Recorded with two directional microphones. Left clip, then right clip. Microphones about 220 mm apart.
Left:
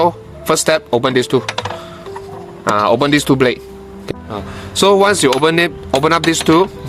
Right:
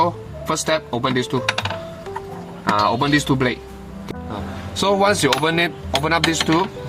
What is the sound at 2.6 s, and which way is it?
Speech, 45° left (ahead or behind).